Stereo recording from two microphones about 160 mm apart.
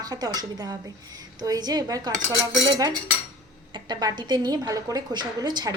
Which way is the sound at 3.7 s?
25° right (ahead or behind).